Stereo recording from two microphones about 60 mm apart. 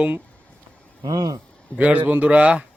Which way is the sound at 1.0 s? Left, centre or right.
Right.